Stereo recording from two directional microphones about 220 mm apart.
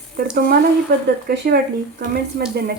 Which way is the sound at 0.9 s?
50° right (ahead or behind).